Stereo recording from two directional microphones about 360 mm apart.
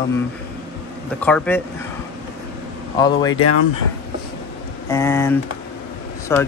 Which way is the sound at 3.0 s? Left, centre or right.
Centre.